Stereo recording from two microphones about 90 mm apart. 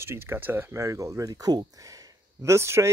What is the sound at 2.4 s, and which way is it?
Speech, 30° right (ahead or behind).